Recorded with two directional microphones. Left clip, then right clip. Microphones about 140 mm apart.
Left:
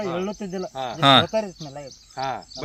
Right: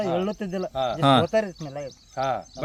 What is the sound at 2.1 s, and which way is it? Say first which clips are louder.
Speech: right 2 dB; 90° right.